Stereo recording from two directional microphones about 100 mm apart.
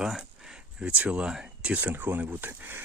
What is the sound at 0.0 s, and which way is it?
Speech, 5° right (ahead or behind).